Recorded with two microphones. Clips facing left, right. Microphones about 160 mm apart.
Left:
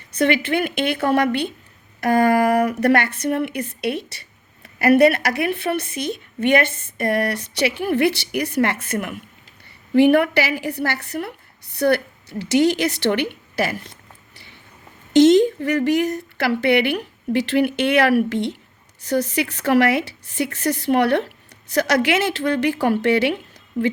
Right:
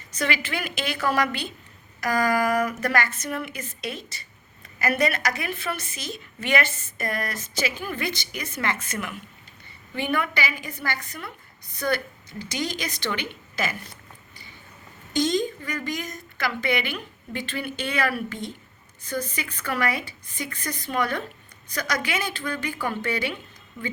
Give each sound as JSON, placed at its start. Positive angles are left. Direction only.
{"t": 0.1, "sound": "a woman's voice", "side_deg": 60}
{"t": 15.1, "sound": "speech", "side_deg": 75}